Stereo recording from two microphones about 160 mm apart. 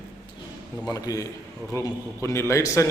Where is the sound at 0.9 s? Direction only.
20° left (ahead or behind).